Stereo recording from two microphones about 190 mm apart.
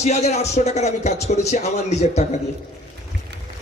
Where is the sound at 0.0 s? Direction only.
35° left (ahead or behind).